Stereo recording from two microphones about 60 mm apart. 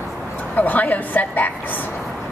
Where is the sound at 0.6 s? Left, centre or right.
Left.